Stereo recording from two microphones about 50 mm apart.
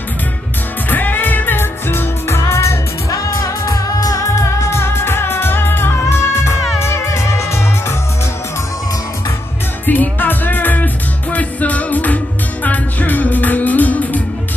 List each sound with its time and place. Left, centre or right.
0.8 s music: left
9.8 s music: left